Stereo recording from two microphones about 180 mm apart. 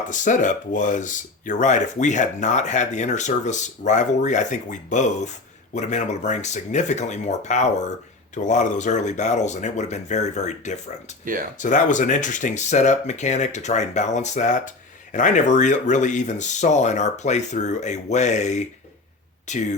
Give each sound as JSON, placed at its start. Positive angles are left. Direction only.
{"t": 0.1, "sound": "speech", "side_deg": 45}